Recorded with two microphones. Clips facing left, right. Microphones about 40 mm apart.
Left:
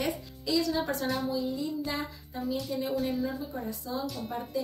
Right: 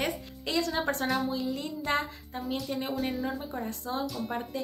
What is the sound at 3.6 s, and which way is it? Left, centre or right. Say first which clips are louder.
Speech: right 1 dB; right.